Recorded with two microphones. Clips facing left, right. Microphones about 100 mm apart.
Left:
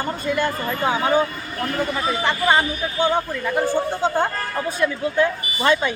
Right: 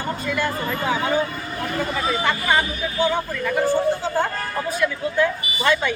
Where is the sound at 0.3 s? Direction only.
25° left (ahead or behind).